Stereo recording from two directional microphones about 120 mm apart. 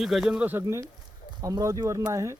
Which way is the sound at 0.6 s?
25° right (ahead or behind).